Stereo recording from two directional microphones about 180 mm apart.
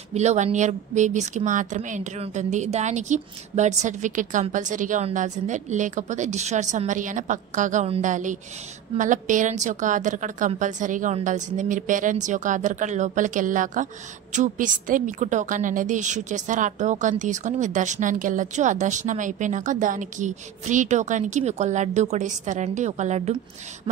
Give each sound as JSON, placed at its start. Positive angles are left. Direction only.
{"t": 0.1, "sound": "a woman's voice", "side_deg": -40}